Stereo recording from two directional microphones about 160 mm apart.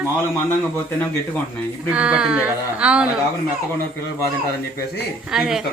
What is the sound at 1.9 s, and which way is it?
Speech, 5° right (ahead or behind).